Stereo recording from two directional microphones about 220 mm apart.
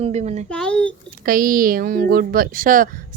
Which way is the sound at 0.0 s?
30° right (ahead or behind).